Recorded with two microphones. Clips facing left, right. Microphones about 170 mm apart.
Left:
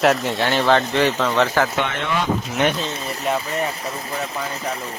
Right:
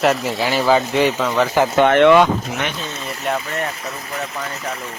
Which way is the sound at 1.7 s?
50° right (ahead or behind).